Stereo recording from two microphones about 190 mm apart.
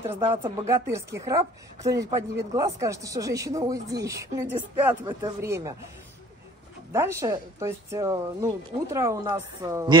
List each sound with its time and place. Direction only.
0.2 s speech: 25° right (ahead or behind)
0.7 s speech: 15° right (ahead or behind)
6.9 s speech: 15° right (ahead or behind)